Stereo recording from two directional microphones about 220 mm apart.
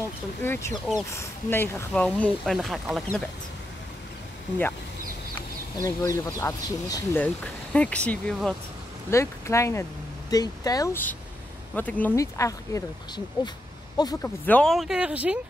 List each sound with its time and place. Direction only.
0.4 s speech: 10° left (ahead or behind)
5.8 s speech: 15° left (ahead or behind)
9.1 s speech: 15° left (ahead or behind); by 15.3 s 5° right (ahead or behind)